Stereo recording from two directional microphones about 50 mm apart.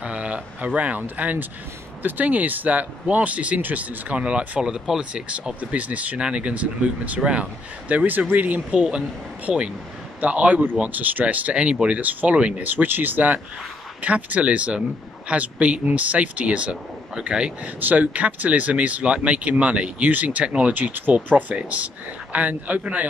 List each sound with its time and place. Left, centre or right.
0.0 s speech: right
5.6 s speech: right
7.9 s a man's voice: right
8.7 s a man's voice: centre
10.2 s speech: right
12.6 s a man's voice: right; by 17.5 s centre
17.7 s a man's voice: right